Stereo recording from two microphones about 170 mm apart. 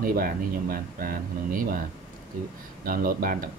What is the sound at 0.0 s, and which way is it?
Speech, 55° right (ahead or behind).